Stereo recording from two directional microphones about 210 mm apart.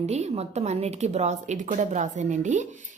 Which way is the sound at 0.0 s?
30° right (ahead or behind).